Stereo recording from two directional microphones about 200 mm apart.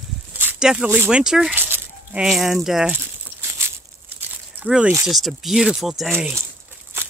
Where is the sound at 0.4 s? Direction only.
5° right (ahead or behind).